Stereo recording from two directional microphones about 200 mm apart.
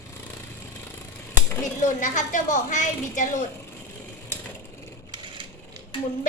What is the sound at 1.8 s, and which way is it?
A woman's voice, 40° left (ahead or behind).